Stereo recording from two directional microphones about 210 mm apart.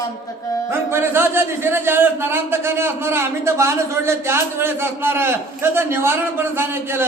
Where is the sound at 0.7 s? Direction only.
10° right (ahead or behind).